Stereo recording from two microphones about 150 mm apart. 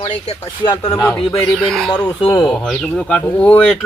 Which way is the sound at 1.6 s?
5° left (ahead or behind).